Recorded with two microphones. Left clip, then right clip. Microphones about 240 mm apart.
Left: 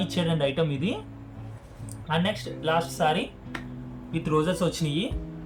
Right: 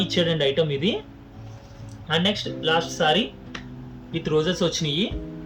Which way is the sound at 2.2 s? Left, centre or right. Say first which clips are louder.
Right 4 dB; left.